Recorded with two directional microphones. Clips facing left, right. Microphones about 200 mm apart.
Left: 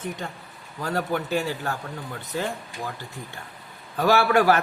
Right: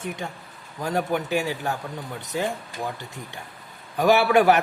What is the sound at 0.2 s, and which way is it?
A man's voice, 15° right (ahead or behind).